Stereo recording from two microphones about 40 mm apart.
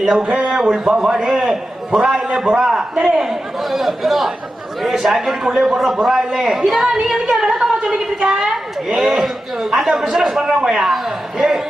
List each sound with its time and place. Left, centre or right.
0.1 s a woman's voice: centre
1.0 s a woman's voice: centre